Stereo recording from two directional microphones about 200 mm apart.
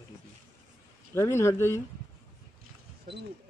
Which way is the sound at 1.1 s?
15° left (ahead or behind).